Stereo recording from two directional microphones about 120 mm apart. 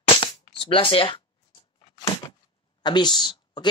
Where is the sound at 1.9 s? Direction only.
25° left (ahead or behind).